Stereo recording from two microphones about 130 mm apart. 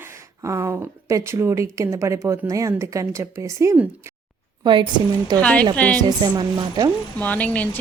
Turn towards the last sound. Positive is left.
turn(degrees=10)  # may be behind; listen again after turning